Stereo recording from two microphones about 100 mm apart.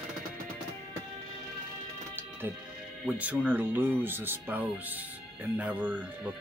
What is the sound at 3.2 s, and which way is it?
Speech, 15° right (ahead or behind).